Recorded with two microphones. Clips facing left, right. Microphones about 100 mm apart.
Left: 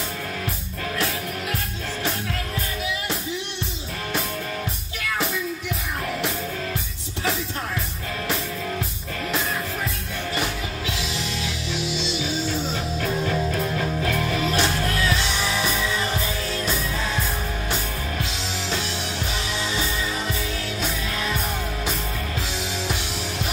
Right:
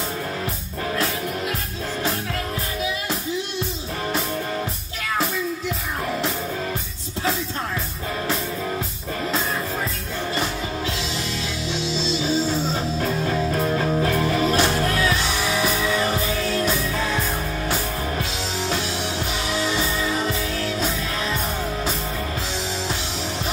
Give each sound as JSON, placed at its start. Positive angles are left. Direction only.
{"t": 13.6, "sound": "music", "side_deg": -30}